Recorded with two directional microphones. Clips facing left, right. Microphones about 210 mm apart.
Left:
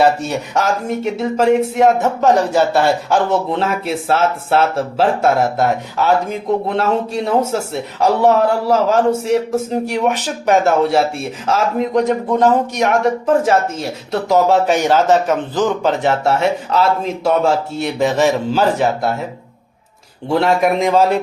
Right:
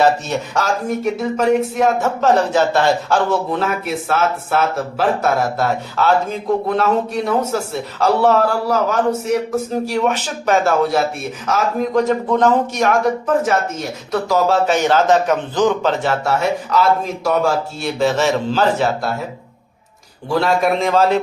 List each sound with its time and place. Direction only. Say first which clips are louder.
0.0 s speech: left 1 dB; 10° left (ahead or behind)
0.9 s speech: even; 25° left (ahead or behind); by 3.2 s 10° left (ahead or behind)
3.2 s a man's voice: left 1 dB; 25° left (ahead or behind)
13.2 s speech: left 3 dB; 30° left (ahead or behind)
14.1 s speech: left 3 dB; 20° left (ahead or behind); by 15.9 s 5° left (ahead or behind)
16.0 s a man's voice: left 3 dB; 25° left (ahead or behind)
20.3 s speech: left 2 dB; 20° left (ahead or behind)